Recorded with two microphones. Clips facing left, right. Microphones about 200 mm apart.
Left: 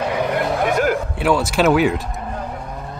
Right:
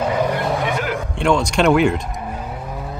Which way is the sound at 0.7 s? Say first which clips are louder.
Left 5 dB; 45° left (ahead or behind).